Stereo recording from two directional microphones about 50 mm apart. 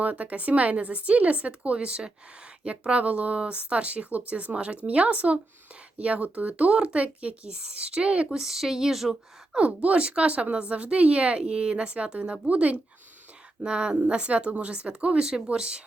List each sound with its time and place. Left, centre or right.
0.0 s speech: right
8.4 s speech: centre
9.5 s speech: right